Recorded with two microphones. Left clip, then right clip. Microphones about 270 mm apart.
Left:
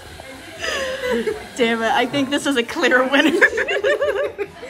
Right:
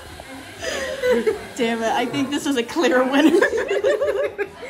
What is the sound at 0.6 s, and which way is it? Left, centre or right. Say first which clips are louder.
Chuckle: left 3 dB; centre.